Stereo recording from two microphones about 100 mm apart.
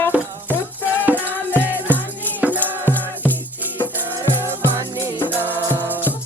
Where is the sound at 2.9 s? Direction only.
20° left (ahead or behind).